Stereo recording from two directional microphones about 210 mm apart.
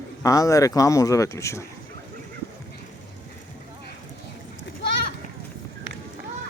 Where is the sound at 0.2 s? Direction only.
15° left (ahead or behind).